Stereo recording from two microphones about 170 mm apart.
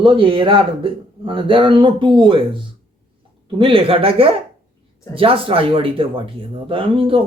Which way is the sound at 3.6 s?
30° right (ahead or behind).